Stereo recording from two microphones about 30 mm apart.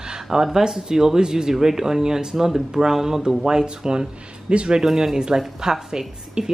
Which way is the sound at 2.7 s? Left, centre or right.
Right.